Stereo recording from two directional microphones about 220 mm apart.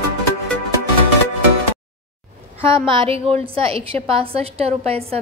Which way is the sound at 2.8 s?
25° right (ahead or behind).